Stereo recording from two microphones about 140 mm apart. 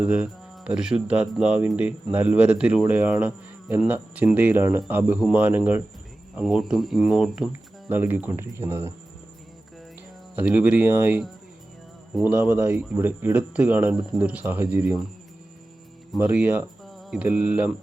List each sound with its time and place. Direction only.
0.0 s speech: 10° right (ahead or behind)
10.3 s speech: 10° right (ahead or behind)
16.1 s speech: 10° right (ahead or behind)
16.8 s mantra: 5° right (ahead or behind)
17.2 s speech: 10° right (ahead or behind)